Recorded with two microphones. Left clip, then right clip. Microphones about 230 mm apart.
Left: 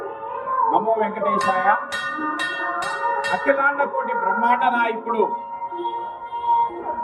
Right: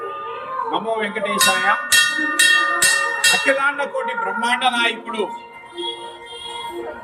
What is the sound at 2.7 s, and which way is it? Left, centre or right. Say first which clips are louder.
Bell: right 5 dB; centre.